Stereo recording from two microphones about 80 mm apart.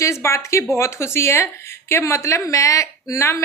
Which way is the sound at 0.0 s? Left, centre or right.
Left.